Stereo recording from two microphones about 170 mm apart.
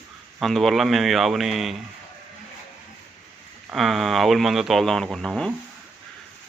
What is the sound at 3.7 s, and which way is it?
A man's voice, centre (ahead or behind).